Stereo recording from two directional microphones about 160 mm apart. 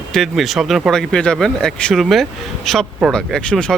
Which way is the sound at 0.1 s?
Centre (ahead or behind).